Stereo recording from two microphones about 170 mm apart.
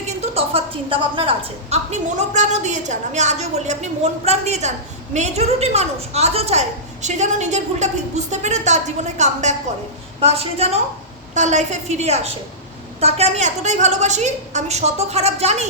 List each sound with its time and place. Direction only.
0.2 s a woman's voice: 35° right (ahead or behind)
1.7 s a woman's voice: 45° right (ahead or behind)